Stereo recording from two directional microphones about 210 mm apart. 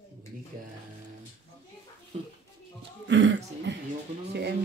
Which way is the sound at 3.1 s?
60° right (ahead or behind).